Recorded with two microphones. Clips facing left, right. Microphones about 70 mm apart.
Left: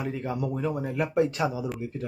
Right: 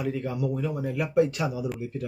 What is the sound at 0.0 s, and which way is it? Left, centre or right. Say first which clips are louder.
A man's voice: right 1 dB; left.